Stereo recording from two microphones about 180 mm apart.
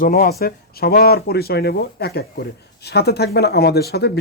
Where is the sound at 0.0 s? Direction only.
50° left (ahead or behind).